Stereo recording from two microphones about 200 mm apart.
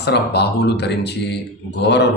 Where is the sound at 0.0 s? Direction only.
55° left (ahead or behind).